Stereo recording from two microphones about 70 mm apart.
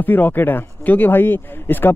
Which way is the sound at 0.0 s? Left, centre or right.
Left.